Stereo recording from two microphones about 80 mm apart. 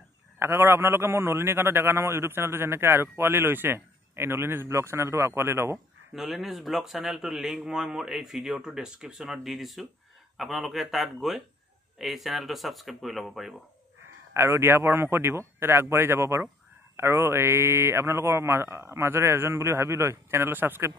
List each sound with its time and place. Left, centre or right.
0.4 s a man's voice: right
6.1 s a man's voice: centre
14.3 s a man's voice: right